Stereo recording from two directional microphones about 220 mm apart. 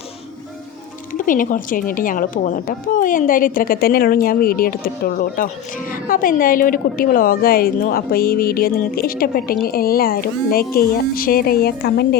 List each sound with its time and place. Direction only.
1.2 s a woman's voice: 35° left (ahead or behind)